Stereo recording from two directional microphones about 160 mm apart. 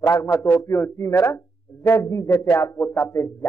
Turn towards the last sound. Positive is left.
turn(degrees=15)  # may be behind; listen again after turning